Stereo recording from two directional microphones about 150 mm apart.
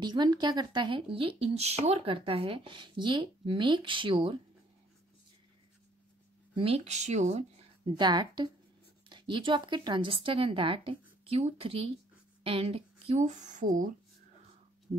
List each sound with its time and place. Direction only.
0.0 s speech: 30° right (ahead or behind)
6.5 s speech: 40° right (ahead or behind)
7.8 s a woman's voice: 30° right (ahead or behind); by 13.9 s 60° right (ahead or behind)